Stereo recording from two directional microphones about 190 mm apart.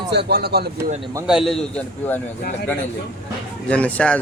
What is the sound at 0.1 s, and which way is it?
Speech, 60° right (ahead or behind).